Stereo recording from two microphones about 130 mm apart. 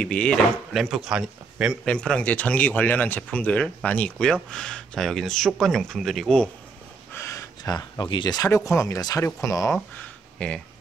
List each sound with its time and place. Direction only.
0.0 s speech: 10° left (ahead or behind)
1.9 s speech: 5° left (ahead or behind)
7.2 s speech: 25° left (ahead or behind)
9.9 s a sound: 10° left (ahead or behind)